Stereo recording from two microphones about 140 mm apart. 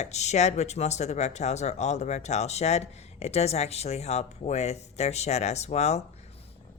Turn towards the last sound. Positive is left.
turn(degrees=50)  # may be behind; listen again after turning